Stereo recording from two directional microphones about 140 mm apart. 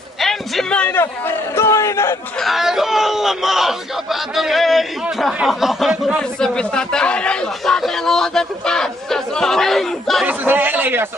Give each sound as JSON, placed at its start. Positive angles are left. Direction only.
{"t": 0.2, "sound": "a sound", "side_deg": 0}
{"t": 2.3, "sound": "speech", "side_deg": 0}
{"t": 10.2, "sound": "speech", "side_deg": -15}